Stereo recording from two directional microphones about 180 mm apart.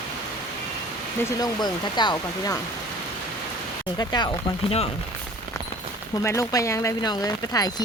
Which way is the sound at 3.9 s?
25° left (ahead or behind).